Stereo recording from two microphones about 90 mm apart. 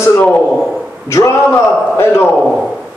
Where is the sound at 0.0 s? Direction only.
30° left (ahead or behind).